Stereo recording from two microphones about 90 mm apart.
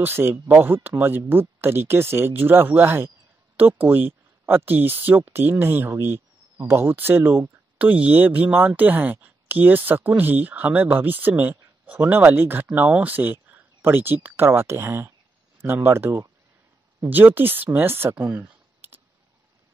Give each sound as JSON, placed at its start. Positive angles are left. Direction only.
{"t": 0.0, "sound": "speech", "side_deg": -25}